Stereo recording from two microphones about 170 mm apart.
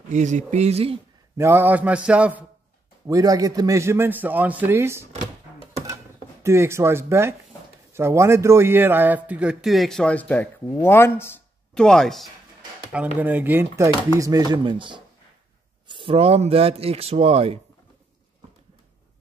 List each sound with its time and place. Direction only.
0.1 s speech: 45° right (ahead or behind)
1.4 s a man's voice: 10° right (ahead or behind)
3.1 s a man's voice: 20° right (ahead or behind)
6.4 s a man's voice: 15° right (ahead or behind); by 11.3 s 15° left (ahead or behind)
11.7 s speech: 5° left (ahead or behind)
12.9 s a man's voice: 10° right (ahead or behind); by 17.6 s 35° right (ahead or behind)